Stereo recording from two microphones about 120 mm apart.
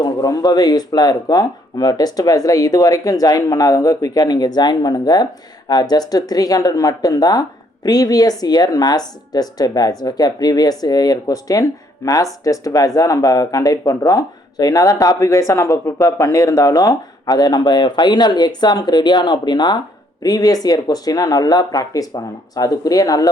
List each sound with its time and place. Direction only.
0.0 s speech: 30° left (ahead or behind)